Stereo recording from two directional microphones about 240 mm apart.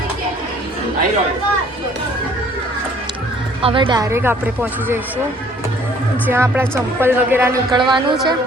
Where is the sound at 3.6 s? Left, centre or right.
Right.